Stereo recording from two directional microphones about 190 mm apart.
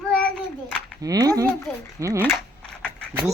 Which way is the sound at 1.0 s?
20° right (ahead or behind).